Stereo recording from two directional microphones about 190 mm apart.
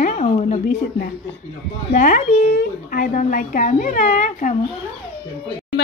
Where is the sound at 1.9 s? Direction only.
40° left (ahead or behind).